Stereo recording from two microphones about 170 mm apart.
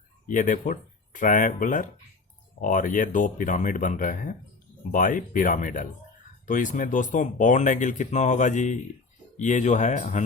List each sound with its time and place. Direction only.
0.3 s speech: 50° left (ahead or behind)